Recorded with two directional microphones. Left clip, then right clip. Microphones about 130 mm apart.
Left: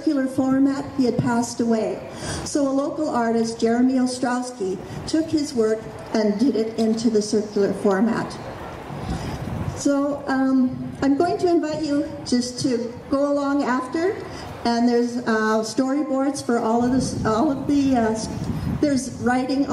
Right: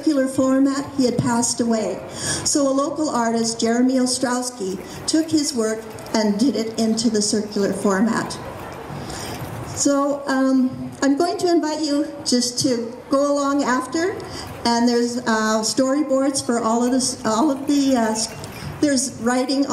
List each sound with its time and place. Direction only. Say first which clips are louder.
0.0 s a woman's voice: right 3 dB; 40° right (ahead or behind)
9.8 s a woman's voice: right 3 dB; 40° right (ahead or behind)